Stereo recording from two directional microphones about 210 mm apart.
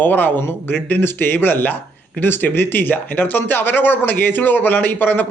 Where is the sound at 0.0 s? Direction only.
10° left (ahead or behind).